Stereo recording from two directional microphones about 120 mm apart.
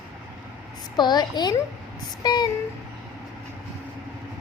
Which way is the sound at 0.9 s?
35° left (ahead or behind).